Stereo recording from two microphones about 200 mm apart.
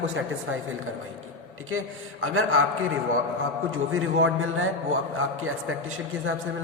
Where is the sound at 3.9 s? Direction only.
90° right.